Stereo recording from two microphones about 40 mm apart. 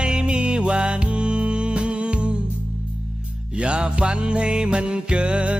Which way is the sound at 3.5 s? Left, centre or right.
Right.